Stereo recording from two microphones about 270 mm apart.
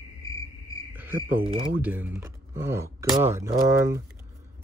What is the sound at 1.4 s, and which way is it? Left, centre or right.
Speech, right.